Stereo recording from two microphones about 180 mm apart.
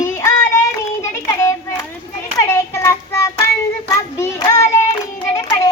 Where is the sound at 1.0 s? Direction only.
15° left (ahead or behind).